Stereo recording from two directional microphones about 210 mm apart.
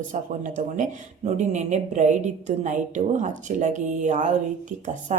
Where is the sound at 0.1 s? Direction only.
35° right (ahead or behind).